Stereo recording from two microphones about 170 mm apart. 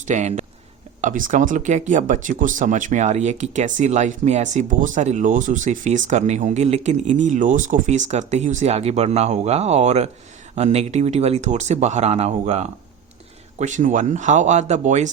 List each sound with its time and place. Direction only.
0.1 s speech: 45° right (ahead or behind)